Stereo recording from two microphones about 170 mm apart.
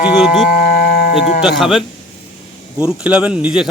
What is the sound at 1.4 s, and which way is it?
Speech, centre (ahead or behind).